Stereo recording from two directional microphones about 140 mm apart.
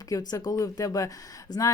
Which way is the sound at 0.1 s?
25° left (ahead or behind).